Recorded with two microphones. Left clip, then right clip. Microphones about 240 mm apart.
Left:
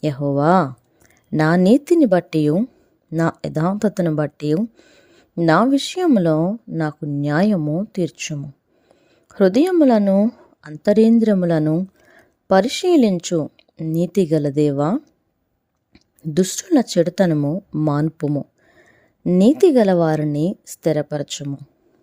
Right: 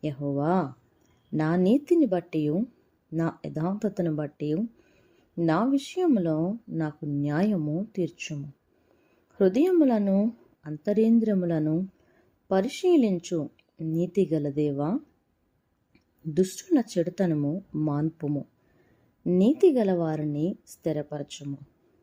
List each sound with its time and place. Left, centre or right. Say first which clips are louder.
0.0 s speech: left 11 dB; left